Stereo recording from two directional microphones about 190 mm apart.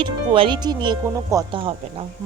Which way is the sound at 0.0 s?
25° right (ahead or behind).